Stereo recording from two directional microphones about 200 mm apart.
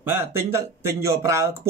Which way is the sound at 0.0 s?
10° right (ahead or behind).